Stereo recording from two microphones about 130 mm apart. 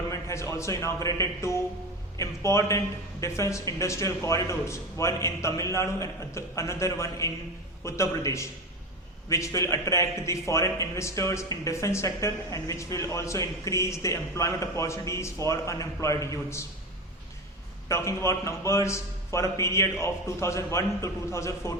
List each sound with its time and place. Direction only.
0.1 s a man's voice: 25° left (ahead or behind)
17.8 s a man's voice: 20° left (ahead or behind)